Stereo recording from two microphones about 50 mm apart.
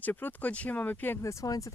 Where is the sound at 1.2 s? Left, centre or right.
Left.